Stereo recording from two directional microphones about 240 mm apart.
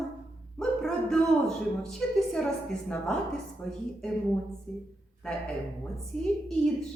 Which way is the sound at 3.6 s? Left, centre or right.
Centre.